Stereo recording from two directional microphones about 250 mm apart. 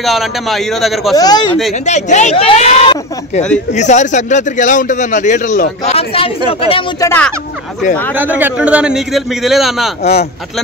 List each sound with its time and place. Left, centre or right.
0.0 s a man's voice: centre
1.1 s speech: centre
1.9 s a man's voice: left
7.1 s a man's voice: centre
8.2 s a man's voice: centre